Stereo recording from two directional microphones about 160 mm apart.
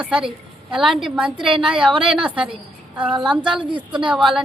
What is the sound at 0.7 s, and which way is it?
Speech, centre (ahead or behind).